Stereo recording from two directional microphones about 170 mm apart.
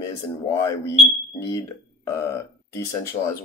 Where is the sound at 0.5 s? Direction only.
15° left (ahead or behind).